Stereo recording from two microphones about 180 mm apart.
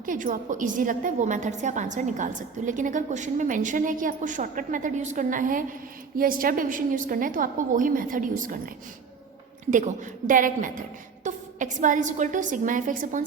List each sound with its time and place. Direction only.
0.0 s a woman's voice: 50° right (ahead or behind)